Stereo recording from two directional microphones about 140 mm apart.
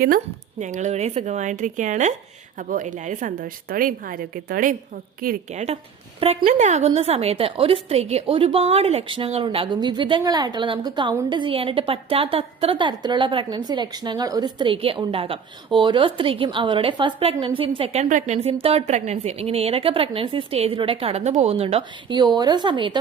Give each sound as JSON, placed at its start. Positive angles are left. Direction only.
{"t": 0.6, "sound": "a woman's voice", "side_deg": -60}
{"t": 5.5, "sound": "a woman's voice", "side_deg": -55}
{"t": 18.1, "sound": "a woman's voice", "side_deg": -55}
{"t": 22.4, "sound": "a woman's voice", "side_deg": -30}